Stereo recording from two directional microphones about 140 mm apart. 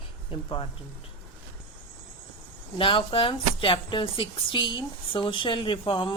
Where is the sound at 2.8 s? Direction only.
35° left (ahead or behind).